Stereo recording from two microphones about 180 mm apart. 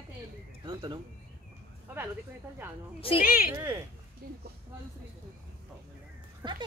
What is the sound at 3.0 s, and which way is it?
Speech, 30° left (ahead or behind).